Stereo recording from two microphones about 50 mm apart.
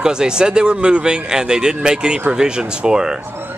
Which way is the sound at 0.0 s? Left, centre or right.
Centre.